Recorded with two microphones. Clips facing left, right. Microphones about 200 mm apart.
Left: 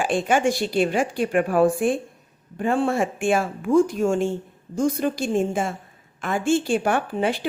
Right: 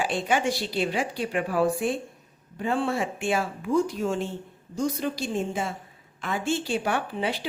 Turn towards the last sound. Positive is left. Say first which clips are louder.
# left 5 dB
turn(degrees=50)  # may be behind; listen again after turning